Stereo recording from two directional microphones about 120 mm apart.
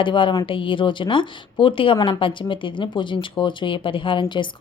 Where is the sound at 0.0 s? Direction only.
45° left (ahead or behind).